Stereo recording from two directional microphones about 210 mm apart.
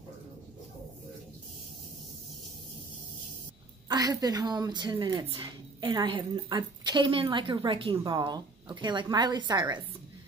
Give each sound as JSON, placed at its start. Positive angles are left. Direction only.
{"t": 3.9, "sound": "a woman's voice", "side_deg": -20}